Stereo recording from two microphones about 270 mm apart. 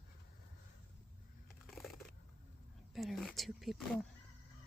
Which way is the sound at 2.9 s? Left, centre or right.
Centre.